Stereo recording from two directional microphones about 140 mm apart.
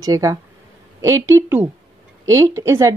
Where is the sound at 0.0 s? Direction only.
25° right (ahead or behind).